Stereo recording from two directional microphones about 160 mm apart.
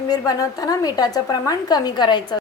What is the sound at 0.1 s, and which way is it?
A woman's voice, 25° left (ahead or behind).